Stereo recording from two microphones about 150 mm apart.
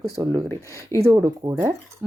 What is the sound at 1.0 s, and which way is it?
Speech, 20° right (ahead or behind).